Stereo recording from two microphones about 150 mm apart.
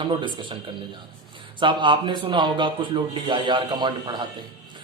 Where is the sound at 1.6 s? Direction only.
30° right (ahead or behind).